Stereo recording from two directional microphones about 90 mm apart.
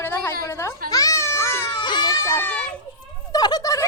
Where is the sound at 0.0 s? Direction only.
20° left (ahead or behind).